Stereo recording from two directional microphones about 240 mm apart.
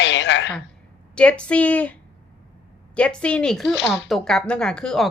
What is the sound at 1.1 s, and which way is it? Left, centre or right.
A woman's voice, centre.